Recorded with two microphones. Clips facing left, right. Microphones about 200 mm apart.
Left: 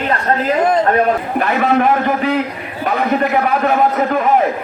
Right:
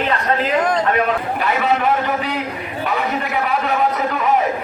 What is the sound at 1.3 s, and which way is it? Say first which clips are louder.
A man's voice: left 5 dB; 50° left (ahead or behind).